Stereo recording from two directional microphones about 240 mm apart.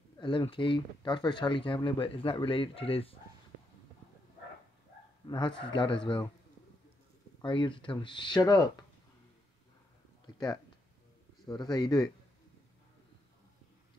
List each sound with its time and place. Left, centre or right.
0.2 s speech: left
5.2 s speech: centre
7.4 s speech: centre
10.2 s a sound: centre
11.5 s speech: centre